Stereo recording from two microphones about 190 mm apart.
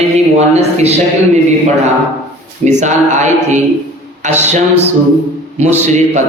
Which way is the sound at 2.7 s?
40° right (ahead or behind).